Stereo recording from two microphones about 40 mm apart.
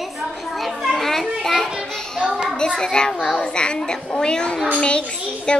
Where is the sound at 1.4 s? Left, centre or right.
Centre.